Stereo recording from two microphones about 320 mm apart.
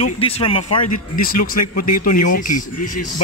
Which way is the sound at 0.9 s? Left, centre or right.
Left.